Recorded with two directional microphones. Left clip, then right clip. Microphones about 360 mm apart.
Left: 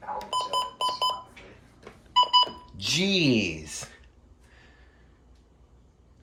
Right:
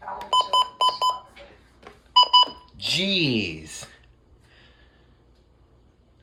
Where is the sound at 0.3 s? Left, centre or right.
Centre.